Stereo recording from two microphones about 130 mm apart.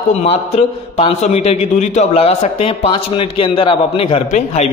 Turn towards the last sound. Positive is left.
turn(degrees=60)  # may be behind; listen again after turning